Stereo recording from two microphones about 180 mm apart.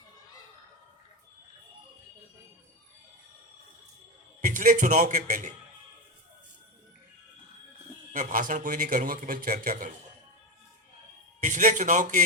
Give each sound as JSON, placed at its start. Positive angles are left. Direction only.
{"t": 4.4, "sound": "a man's voice", "side_deg": -45}
{"t": 8.1, "sound": "a man's voice", "side_deg": -50}
{"t": 11.3, "sound": "a man's voice", "side_deg": -45}